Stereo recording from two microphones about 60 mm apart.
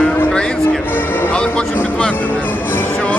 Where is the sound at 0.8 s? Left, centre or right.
Left.